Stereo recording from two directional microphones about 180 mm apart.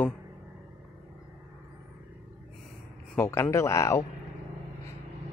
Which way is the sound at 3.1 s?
15° left (ahead or behind).